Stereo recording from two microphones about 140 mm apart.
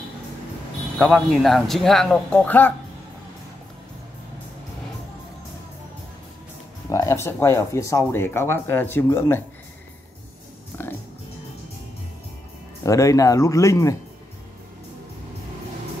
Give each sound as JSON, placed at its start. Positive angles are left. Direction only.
{"t": 0.9, "sound": "speech", "side_deg": 5}
{"t": 6.9, "sound": "speech", "side_deg": 20}
{"t": 10.7, "sound": "music", "side_deg": 15}
{"t": 12.8, "sound": "speech", "side_deg": 25}